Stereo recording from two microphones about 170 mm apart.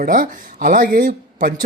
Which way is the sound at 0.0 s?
50° right (ahead or behind).